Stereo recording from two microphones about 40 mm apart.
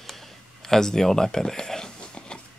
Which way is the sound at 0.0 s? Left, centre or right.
Centre.